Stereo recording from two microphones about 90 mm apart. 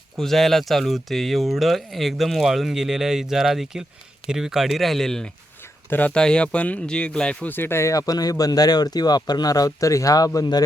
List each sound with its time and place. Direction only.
0.2 s speech: 5° left (ahead or behind)
7.5 s speech: 25° left (ahead or behind); by 10.6 s 45° left (ahead or behind)